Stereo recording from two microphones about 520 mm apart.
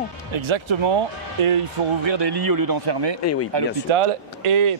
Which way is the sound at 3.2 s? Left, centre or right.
Left.